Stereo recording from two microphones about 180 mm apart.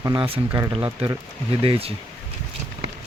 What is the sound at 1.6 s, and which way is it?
Speech, 30° right (ahead or behind).